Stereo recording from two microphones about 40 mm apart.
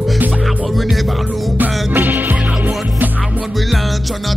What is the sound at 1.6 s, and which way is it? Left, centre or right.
Music, right.